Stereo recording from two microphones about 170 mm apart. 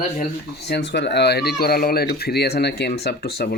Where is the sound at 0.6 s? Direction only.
75° left (ahead or behind).